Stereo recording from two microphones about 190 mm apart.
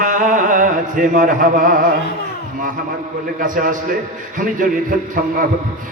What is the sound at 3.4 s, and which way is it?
A man's voice, 45° right (ahead or behind).